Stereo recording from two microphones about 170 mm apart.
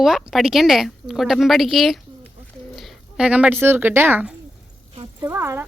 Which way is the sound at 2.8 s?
Centre (ahead or behind).